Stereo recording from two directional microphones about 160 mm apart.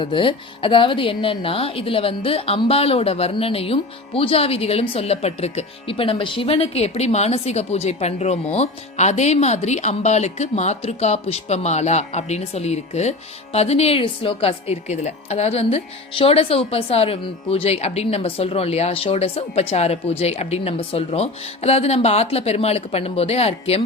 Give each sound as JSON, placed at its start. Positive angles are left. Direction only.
{"t": 0.0, "sound": "speech", "side_deg": 30}